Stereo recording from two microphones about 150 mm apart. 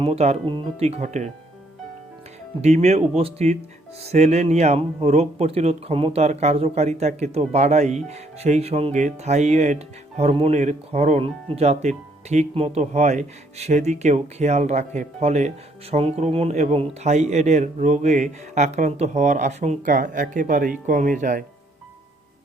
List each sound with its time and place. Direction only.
0.0 s speech: 45° right (ahead or behind)
2.6 s speech: 45° right (ahead or behind)